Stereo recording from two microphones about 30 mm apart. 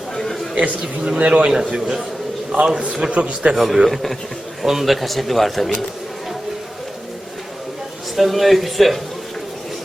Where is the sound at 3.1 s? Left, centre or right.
Right.